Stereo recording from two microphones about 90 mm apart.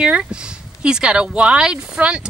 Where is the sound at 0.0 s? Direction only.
10° right (ahead or behind).